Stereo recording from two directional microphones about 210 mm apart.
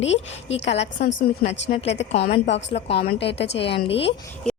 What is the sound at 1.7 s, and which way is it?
Speech, 25° left (ahead or behind).